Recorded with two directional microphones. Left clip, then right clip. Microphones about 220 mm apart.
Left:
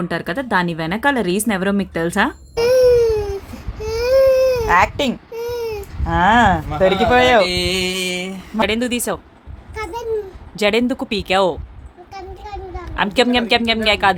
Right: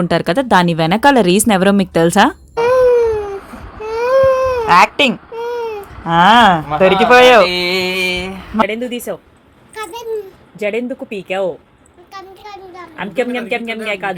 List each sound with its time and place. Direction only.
0.0 s speech: 30° right (ahead or behind)
2.6 s baby cry: 20° left (ahead or behind)
4.6 s speech: 20° right (ahead or behind)
5.3 s baby cry: 15° left (ahead or behind)
6.1 s speech: 15° right (ahead or behind)
7.4 s music: 30° left (ahead or behind)
8.6 s speech: 20° left (ahead or behind)
9.7 s a sound: 10° left (ahead or behind)
10.6 s speech: 20° left (ahead or behind)
12.1 s a sound: 5° left (ahead or behind)
13.0 s speech: 20° left (ahead or behind)